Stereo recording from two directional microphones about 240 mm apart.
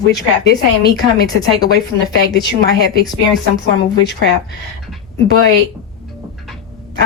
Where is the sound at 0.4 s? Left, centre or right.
Left.